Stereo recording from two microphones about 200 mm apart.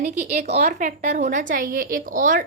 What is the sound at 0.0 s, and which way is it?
A woman's voice, 35° right (ahead or behind).